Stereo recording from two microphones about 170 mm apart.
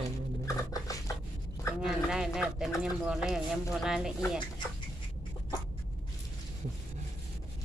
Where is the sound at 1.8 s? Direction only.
5° right (ahead or behind).